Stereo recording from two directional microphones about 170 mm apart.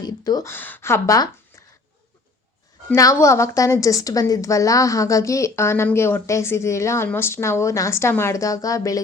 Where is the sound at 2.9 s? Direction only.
20° left (ahead or behind).